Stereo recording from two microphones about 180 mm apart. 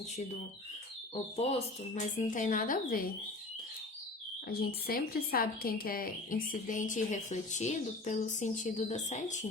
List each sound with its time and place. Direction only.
1.1 s speech: 35° left (ahead or behind)
2.3 s a woman's voice: 45° left (ahead or behind)
4.4 s a woman's voice: 55° left (ahead or behind); by 9.5 s 40° left (ahead or behind)